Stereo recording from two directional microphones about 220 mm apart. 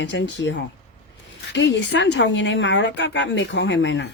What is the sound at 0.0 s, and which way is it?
Speech, 55° left (ahead or behind).